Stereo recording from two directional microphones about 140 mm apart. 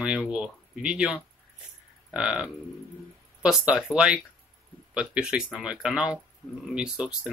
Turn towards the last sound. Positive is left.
turn(degrees=-5)  # may be behind; listen again after turning